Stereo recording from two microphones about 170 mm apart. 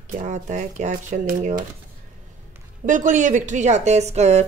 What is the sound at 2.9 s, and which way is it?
Speech, 50° right (ahead or behind).